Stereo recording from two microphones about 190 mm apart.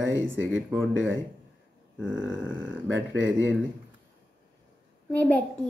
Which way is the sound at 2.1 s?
80° right.